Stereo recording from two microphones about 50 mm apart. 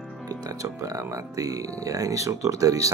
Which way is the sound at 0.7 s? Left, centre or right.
Right.